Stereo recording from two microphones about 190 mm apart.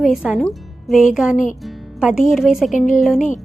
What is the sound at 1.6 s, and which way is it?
Music, 5° right (ahead or behind).